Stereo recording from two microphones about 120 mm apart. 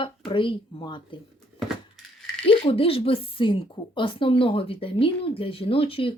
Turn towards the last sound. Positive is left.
turn(degrees=50)  # may be behind; listen again after turning